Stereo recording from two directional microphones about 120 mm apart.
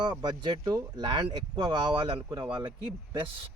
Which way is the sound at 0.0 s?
35° right (ahead or behind).